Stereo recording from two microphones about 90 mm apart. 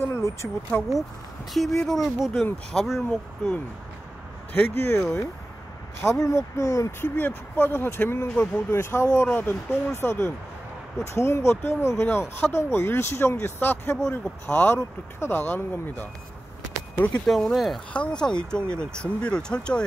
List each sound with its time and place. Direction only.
0.0 s a sound: 30° left (ahead or behind)
0.7 s speech: 25° left (ahead or behind)
1.5 s speech: centre (ahead or behind)
4.6 s speech: 25° left (ahead or behind)
7.2 s speech: 20° left (ahead or behind)
9.3 s speech: 20° left (ahead or behind)
17.3 s speech: centre (ahead or behind)
17.9 s speech: 15° left (ahead or behind)